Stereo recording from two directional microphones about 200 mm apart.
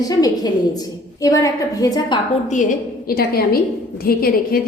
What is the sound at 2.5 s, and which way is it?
A woman's voice, 40° left (ahead or behind).